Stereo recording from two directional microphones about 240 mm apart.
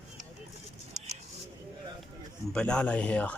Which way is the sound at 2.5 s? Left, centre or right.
Centre.